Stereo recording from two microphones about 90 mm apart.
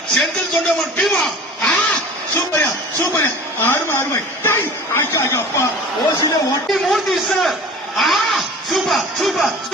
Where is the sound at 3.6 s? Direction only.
25° left (ahead or behind).